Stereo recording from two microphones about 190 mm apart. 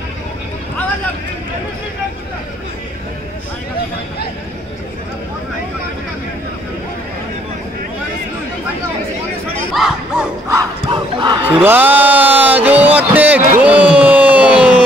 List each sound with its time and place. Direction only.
9.8 s a sound: 5° right (ahead or behind)
10.5 s battle cry: 20° right (ahead or behind)
11.5 s speech: 10° right (ahead or behind)